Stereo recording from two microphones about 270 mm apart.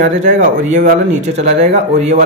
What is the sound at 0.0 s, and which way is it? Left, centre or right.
Speech, right.